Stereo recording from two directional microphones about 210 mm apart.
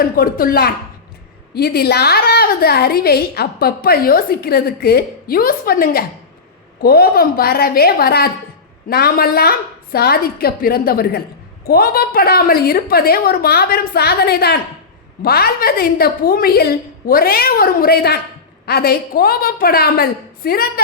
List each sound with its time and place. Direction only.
0.0 s a woman's voice: 45° left (ahead or behind)